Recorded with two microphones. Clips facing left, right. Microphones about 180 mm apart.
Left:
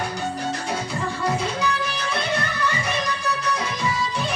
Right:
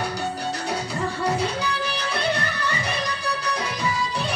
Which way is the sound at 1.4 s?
35° right (ahead or behind).